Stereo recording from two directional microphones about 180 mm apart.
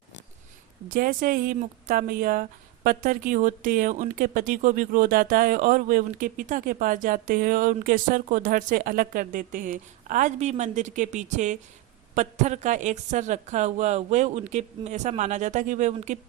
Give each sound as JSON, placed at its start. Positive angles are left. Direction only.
{"t": 0.9, "sound": "a woman's voice", "side_deg": -55}